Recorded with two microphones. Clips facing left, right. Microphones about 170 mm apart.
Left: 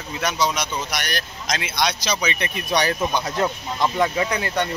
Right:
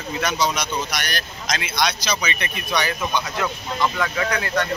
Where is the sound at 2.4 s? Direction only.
40° left (ahead or behind).